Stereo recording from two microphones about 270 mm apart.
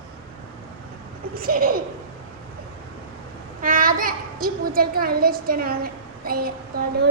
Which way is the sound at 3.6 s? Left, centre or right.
Right.